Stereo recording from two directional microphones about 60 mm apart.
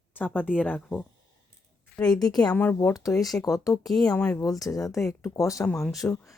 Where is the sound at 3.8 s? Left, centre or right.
Centre.